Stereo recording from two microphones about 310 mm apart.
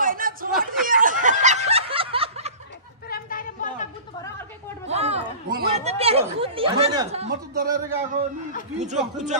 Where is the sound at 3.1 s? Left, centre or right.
Left.